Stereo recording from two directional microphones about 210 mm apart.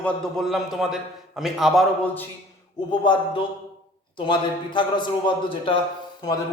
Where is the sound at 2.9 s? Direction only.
25° left (ahead or behind).